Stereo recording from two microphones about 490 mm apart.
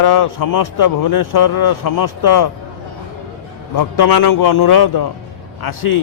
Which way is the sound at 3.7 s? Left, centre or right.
Left.